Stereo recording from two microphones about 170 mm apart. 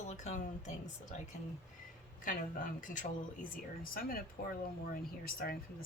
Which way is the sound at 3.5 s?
55° left (ahead or behind).